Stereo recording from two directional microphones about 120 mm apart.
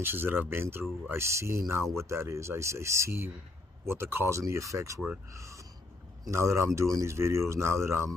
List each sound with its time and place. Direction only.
0.0 s speech: 20° right (ahead or behind)